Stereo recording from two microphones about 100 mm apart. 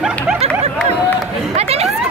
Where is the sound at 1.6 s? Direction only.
90° right.